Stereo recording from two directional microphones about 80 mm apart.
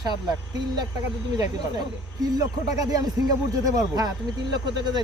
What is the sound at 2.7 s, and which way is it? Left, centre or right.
Speech, right.